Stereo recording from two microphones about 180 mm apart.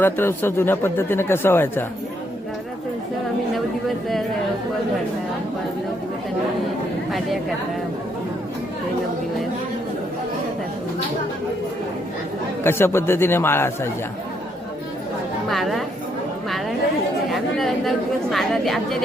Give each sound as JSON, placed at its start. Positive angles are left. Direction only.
{"t": 0.0, "sound": "a man's voice", "side_deg": 15}
{"t": 12.6, "sound": "a man's voice", "side_deg": 15}
{"t": 15.4, "sound": "a woman's voice", "side_deg": 0}
{"t": 17.2, "sound": "a woman's voice", "side_deg": 0}